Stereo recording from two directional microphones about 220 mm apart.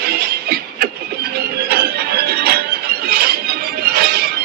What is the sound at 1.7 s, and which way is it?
Music, 45° right (ahead or behind).